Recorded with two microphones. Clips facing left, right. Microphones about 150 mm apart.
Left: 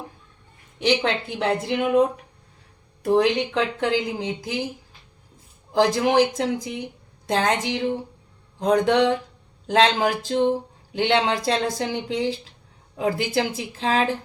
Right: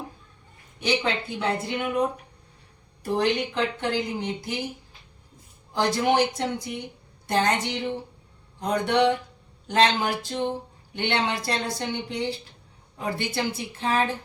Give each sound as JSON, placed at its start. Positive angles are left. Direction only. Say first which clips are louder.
{"t": 0.8, "sound": "speech", "louder": "left 4 dB", "side_deg": 90}
{"t": 3.0, "sound": "speech", "louder": "left 5 dB", "side_deg": 90}
{"t": 5.7, "sound": "speech", "louder": "left 4 dB", "side_deg": 90}